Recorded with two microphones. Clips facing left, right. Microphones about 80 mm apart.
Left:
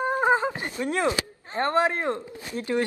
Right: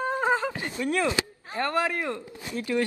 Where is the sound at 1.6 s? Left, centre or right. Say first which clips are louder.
Left 3 dB; left.